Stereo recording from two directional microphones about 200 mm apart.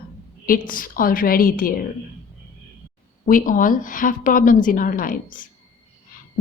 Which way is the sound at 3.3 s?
40° left (ahead or behind).